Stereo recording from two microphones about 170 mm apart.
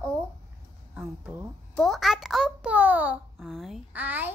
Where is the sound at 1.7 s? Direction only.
Centre (ahead or behind).